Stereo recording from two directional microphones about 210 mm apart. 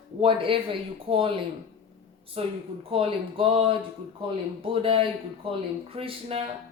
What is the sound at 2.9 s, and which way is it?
Speech, 25° right (ahead or behind).